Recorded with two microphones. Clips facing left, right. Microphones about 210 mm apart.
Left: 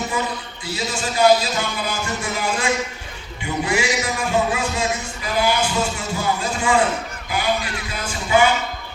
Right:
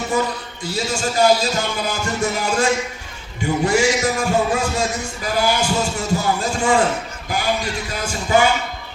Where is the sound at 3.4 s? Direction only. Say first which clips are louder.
Right 5 dB; 45° right (ahead or behind).